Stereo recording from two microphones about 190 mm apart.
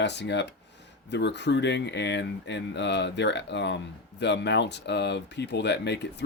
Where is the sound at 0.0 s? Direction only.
65° left (ahead or behind).